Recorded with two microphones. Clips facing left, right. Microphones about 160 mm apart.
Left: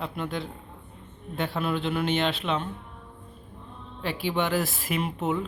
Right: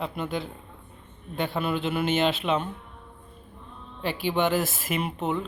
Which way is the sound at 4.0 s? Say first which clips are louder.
Right 2 dB; centre (ahead or behind).